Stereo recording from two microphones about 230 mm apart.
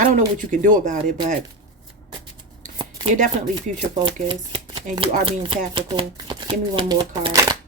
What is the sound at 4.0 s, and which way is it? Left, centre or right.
Speech, right.